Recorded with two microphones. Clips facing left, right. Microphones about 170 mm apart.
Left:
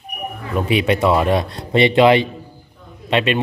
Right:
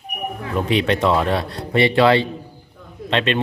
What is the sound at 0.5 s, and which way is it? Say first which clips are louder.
Speech: left 2 dB; 10° left (ahead or behind).